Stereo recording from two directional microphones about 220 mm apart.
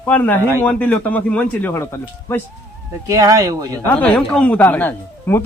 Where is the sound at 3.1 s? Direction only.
15° right (ahead or behind).